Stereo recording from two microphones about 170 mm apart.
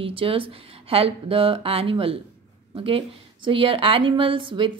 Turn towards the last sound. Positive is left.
turn(degrees=-30)  # may be behind; listen again after turning